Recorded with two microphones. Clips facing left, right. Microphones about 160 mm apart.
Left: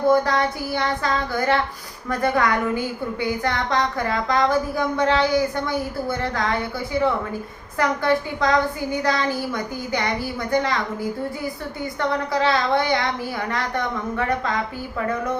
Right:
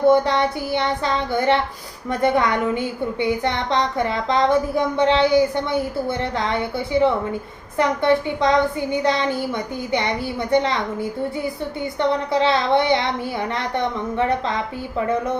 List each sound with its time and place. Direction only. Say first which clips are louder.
0.1 s a woman's voice: right 2 dB; 25° right (ahead or behind)
11.9 s a woman's voice: right 3 dB; 25° right (ahead or behind)